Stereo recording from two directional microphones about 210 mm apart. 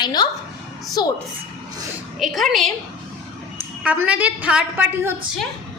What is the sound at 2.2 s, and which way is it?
Speech, centre (ahead or behind).